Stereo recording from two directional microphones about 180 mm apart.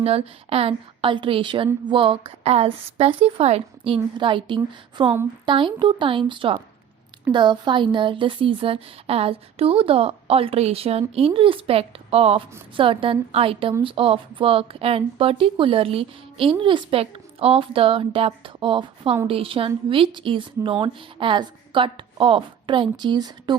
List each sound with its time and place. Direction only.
0.0 s a woman's voice: 35° right (ahead or behind)